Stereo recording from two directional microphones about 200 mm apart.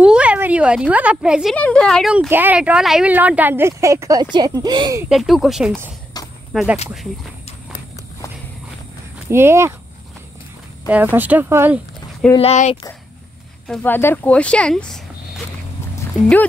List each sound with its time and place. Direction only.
0.0 s a woman's voice: 5° right (ahead or behind)
5.1 s speech: centre (ahead or behind)
6.2 s a sound: 20° left (ahead or behind)
6.5 s speech: 5° right (ahead or behind)
9.3 s a woman's voice: 15° right (ahead or behind)
10.9 s a woman's voice: 10° right (ahead or behind)
12.4 s speech: 30° left (ahead or behind)
13.7 s speech: 10° left (ahead or behind)